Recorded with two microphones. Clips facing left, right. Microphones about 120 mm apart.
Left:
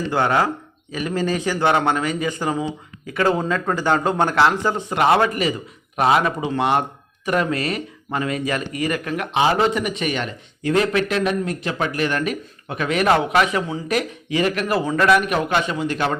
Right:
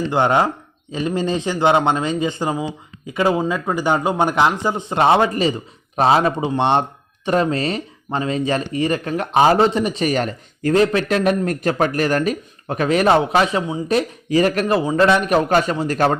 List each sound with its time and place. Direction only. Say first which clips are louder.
0.1 s a man's voice: right 2 dB; 20° right (ahead or behind); by 16.1 s 40° right (ahead or behind)